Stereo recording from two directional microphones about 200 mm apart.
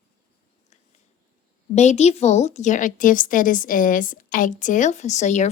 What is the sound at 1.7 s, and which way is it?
A woman's voice, 35° left (ahead or behind).